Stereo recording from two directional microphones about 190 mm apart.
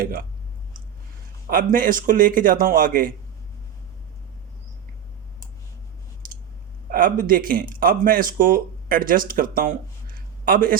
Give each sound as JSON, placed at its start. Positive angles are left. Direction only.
{"t": 0.0, "sound": "a man's voice", "side_deg": -50}
{"t": 1.5, "sound": "a man's voice", "side_deg": -45}
{"t": 6.9, "sound": "speech", "side_deg": -45}